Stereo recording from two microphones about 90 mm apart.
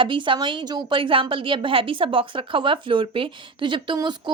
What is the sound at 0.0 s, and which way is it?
A woman's voice, 65° right (ahead or behind).